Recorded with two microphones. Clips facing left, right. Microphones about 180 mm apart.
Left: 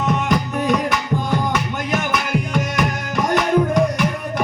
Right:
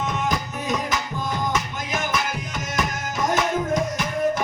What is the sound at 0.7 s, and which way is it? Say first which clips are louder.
Music: left 5 dB; 60° left (ahead or behind).